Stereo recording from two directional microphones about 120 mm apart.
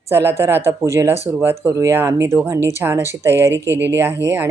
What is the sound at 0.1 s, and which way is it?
A woman's voice, 20° right (ahead or behind).